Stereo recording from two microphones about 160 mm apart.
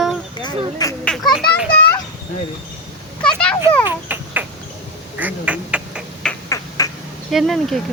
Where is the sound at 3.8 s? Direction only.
10° right (ahead or behind).